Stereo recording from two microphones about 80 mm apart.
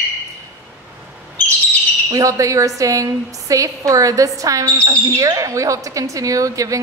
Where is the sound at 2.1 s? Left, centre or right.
Right.